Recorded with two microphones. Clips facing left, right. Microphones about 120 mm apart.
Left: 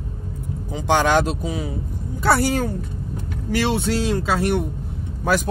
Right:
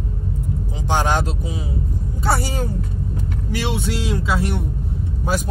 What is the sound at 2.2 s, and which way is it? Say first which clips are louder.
Speech: left 4 dB; 65° left (ahead or behind).